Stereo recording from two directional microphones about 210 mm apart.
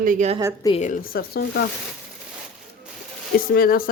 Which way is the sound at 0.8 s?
40° left (ahead or behind).